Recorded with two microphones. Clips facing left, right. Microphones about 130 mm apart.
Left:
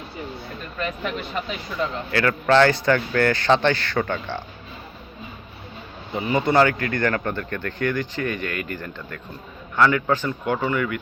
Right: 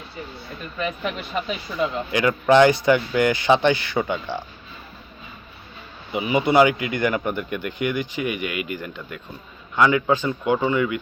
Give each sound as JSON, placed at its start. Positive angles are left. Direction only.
{"t": 0.8, "sound": "speech", "side_deg": -5}
{"t": 1.8, "sound": "speech", "side_deg": -15}
{"t": 6.1, "sound": "speech", "side_deg": -15}